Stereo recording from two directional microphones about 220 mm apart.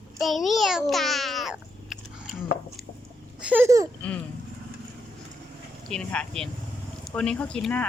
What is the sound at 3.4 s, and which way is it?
Speech, 10° right (ahead or behind).